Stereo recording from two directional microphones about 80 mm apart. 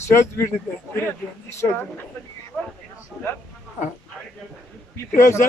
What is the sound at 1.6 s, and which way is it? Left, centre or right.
Speech, left.